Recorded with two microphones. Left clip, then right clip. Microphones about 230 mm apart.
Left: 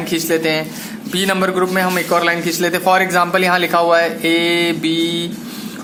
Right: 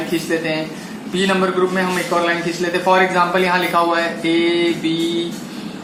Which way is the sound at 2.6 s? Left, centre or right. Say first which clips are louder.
Left 1 dB; left.